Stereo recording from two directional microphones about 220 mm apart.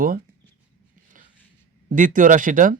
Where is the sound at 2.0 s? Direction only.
35° right (ahead or behind).